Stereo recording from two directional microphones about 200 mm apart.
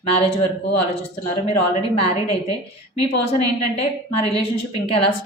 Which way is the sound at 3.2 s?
30° left (ahead or behind).